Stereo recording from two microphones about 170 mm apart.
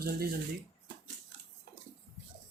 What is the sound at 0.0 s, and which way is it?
Speech, 65° right (ahead or behind).